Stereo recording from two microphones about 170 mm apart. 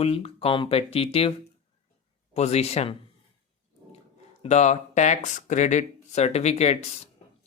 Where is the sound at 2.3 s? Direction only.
40° left (ahead or behind).